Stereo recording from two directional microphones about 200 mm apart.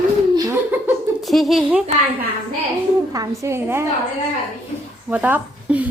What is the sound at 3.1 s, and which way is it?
Speech, 15° right (ahead or behind).